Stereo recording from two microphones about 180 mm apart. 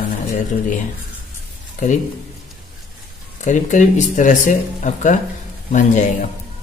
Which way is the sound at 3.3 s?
45° left (ahead or behind).